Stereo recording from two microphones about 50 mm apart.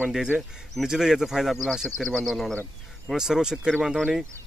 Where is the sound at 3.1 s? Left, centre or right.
Centre.